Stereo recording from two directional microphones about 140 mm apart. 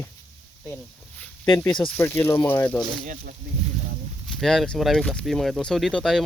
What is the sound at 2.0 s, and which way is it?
Speech, 20° left (ahead or behind).